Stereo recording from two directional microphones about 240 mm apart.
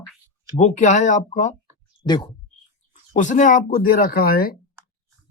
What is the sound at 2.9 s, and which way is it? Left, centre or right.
Speech, left.